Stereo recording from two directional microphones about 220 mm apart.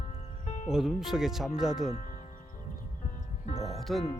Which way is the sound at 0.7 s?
Centre (ahead or behind).